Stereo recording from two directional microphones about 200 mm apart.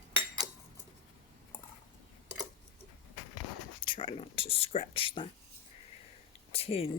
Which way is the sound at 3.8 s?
25° left (ahead or behind).